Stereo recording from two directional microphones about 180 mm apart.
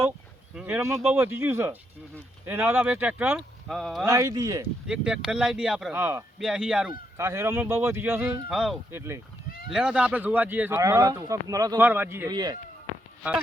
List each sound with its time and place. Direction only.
0.5 s speech: 10° right (ahead or behind)
4.0 s speech: 20° right (ahead or behind)
4.9 s speech: 5° right (ahead or behind)
7.2 s speech: 15° right (ahead or behind)
8.4 s speech: centre (ahead or behind)
8.9 s speech: 15° right (ahead or behind)